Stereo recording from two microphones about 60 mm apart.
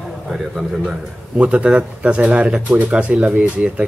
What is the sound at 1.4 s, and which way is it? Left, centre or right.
Speech, right.